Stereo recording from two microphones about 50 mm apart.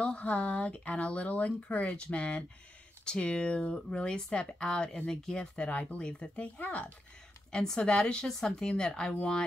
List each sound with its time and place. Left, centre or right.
0.0 s speech: left
5.7 s speech: left
7.5 s speech: centre